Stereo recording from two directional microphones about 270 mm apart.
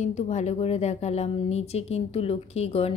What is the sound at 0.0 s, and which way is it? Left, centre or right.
A woman's voice, left.